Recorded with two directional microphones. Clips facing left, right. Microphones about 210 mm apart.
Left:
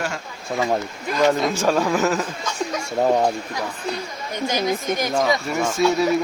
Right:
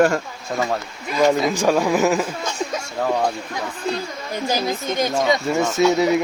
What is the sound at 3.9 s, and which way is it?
Speech, 30° right (ahead or behind).